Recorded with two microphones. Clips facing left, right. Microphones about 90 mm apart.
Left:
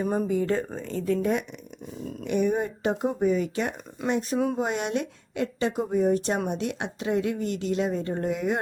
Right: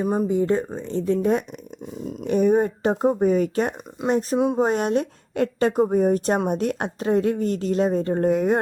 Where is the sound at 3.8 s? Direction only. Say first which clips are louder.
Right 3 dB; 15° right (ahead or behind).